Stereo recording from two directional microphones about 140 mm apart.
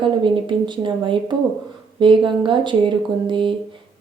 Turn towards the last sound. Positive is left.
turn(degrees=-35)  # may be behind; listen again after turning